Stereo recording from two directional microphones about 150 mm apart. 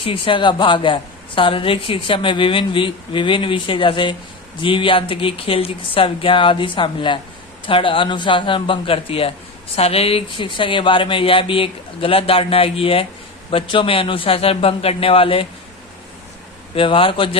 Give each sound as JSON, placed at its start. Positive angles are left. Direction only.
{"t": 0.0, "sound": "speech", "side_deg": 35}
{"t": 16.7, "sound": "speech", "side_deg": 35}